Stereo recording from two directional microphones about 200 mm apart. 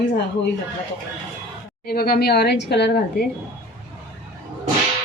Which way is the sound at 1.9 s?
50° left (ahead or behind).